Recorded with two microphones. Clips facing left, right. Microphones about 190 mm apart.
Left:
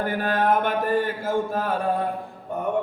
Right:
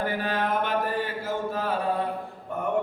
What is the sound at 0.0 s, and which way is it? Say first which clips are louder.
Speech: left 4 dB; 50° left (ahead or behind).